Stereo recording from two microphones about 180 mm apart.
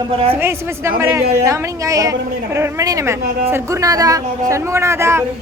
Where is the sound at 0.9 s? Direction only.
15° right (ahead or behind).